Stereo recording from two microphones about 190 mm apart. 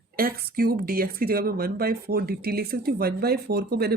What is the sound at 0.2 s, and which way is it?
Speech, 50° right (ahead or behind).